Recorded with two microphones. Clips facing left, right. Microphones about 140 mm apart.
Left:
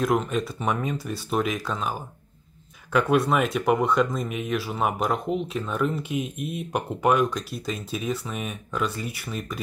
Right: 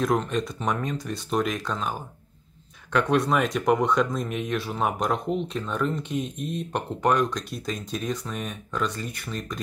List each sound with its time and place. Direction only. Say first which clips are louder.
0.0 s speech: left 1 dB; 5° left (ahead or behind)